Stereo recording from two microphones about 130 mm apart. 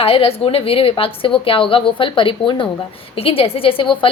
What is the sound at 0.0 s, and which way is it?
A woman's voice, 50° left (ahead or behind).